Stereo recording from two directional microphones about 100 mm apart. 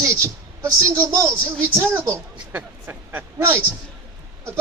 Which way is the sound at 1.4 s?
30° right (ahead or behind).